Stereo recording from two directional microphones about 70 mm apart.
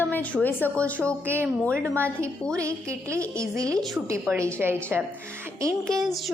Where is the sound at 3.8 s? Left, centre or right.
Centre.